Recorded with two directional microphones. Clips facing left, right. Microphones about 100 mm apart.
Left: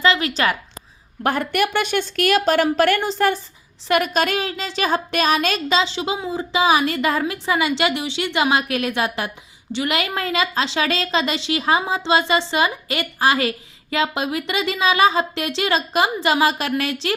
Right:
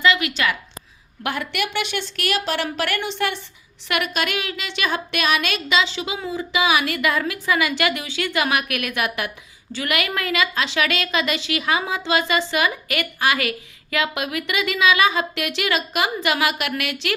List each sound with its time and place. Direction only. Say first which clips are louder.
0.0 s a woman's voice: left 1 dB; 35° left (ahead or behind)
1.2 s a woman's voice: left 6 dB; 45° left (ahead or behind)